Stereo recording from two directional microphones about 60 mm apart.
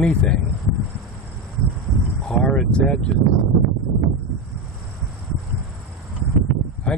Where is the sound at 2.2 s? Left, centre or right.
Centre.